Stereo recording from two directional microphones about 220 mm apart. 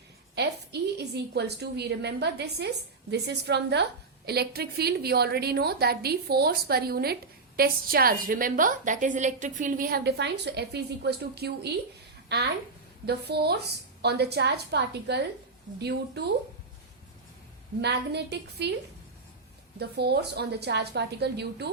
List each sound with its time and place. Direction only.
0.3 s a woman's voice: 50° right (ahead or behind)
17.7 s a woman's voice: 50° right (ahead or behind)
19.8 s a woman's voice: 50° right (ahead or behind)